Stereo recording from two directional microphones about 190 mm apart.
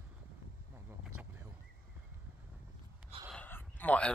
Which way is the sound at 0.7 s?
10° right (ahead or behind).